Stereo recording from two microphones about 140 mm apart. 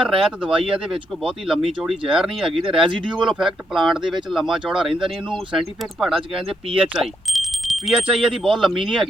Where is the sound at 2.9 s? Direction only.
35° right (ahead or behind).